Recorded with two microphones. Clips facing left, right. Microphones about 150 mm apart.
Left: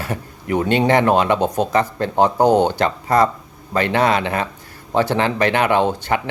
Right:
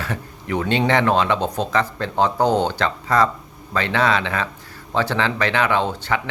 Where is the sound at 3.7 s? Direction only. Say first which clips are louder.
Left 3 dB; 50° left (ahead or behind).